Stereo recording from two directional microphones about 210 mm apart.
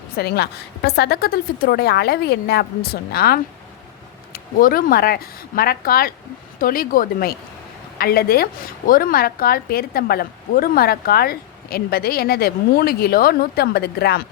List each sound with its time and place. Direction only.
0.2 s a woman's voice: 50° left (ahead or behind)